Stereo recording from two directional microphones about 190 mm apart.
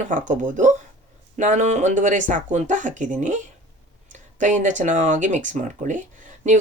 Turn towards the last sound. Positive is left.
turn(degrees=-40)  # may be behind; listen again after turning